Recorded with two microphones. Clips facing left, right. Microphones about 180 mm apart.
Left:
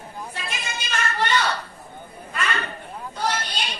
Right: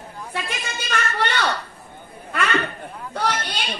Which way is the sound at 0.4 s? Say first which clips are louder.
Right 2 dB; 60° right (ahead or behind).